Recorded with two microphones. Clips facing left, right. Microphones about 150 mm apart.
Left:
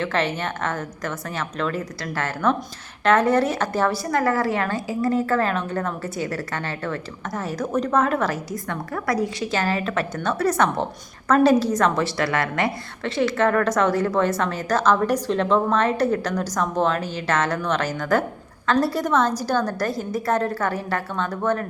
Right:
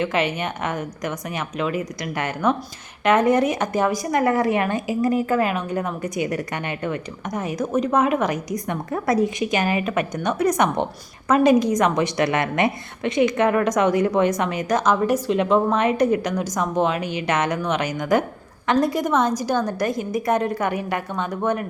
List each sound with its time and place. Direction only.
0.0 s a woman's voice: 10° right (ahead or behind)